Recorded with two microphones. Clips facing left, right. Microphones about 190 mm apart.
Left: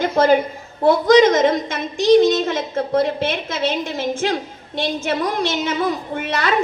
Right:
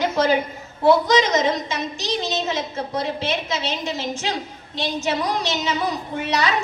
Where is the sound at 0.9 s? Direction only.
50° left (ahead or behind).